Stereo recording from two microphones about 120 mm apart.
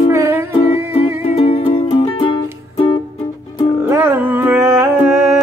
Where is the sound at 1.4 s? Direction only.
60° left (ahead or behind).